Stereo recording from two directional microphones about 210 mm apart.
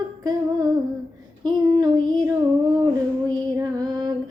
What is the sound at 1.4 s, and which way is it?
Child singing, 20° right (ahead or behind).